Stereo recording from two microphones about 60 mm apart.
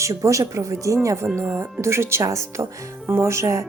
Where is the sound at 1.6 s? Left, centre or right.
Right.